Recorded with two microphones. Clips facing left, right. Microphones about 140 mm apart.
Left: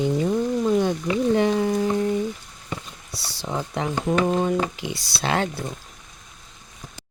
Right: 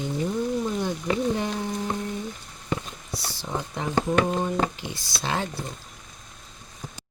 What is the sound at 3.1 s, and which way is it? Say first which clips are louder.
Speech: left 2 dB; 75° left (ahead or behind).